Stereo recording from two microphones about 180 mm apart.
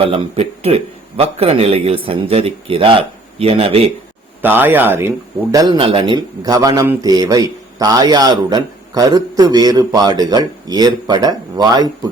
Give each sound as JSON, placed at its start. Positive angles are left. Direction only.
{"t": 0.0, "sound": "a man's voice", "side_deg": -30}
{"t": 4.4, "sound": "a man's voice", "side_deg": -10}
{"t": 5.7, "sound": "a man's voice", "side_deg": -30}